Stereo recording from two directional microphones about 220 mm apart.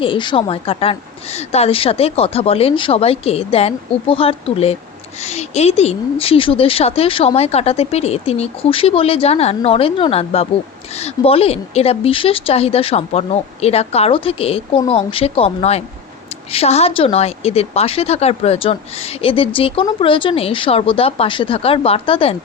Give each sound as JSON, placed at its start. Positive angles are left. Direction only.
{"t": 0.0, "sound": "a woman's voice", "side_deg": 20}